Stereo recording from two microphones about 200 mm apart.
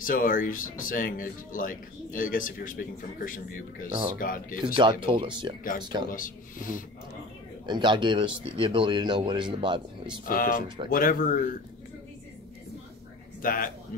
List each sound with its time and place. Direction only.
0.0 s speech: 45° left (ahead or behind)
5.0 s speech: 25° right (ahead or behind)
6.0 s speech: 45° left (ahead or behind)
7.6 s speech: 20° right (ahead or behind)
10.2 s speech: 45° left (ahead or behind)
13.4 s speech: 45° left (ahead or behind)